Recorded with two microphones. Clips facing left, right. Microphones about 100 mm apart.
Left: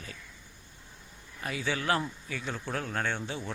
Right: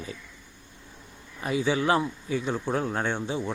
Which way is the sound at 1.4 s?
20° right (ahead or behind).